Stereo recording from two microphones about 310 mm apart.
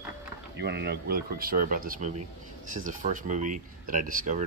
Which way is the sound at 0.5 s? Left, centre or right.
Right.